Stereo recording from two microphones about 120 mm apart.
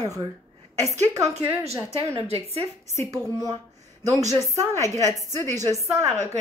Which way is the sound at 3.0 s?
30° right (ahead or behind).